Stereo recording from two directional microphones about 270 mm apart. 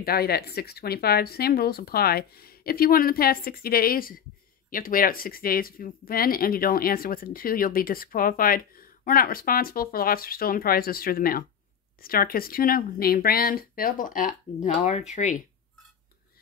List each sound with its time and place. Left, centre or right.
0.0 s speech: left